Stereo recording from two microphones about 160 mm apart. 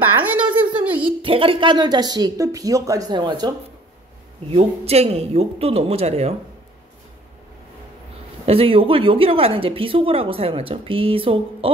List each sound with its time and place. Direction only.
0.1 s a sound: 10° right (ahead or behind)
1.2 s speech: 35° right (ahead or behind)
4.5 s speech: 40° right (ahead or behind)
8.5 s speech: 35° right (ahead or behind)